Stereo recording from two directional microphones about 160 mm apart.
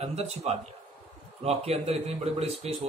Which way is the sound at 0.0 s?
40° right (ahead or behind).